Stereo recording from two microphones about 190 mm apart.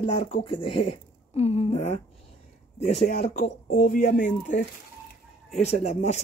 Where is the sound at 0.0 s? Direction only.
30° left (ahead or behind).